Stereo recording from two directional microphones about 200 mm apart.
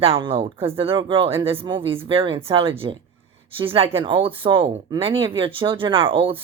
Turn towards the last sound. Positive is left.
turn(degrees=-25)  # may be behind; listen again after turning